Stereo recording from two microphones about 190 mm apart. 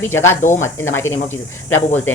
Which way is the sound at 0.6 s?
90° left.